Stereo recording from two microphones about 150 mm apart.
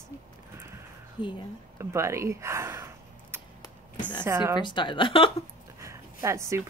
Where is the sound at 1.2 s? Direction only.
30° left (ahead or behind).